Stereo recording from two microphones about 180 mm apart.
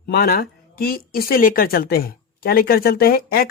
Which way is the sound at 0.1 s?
60° left (ahead or behind).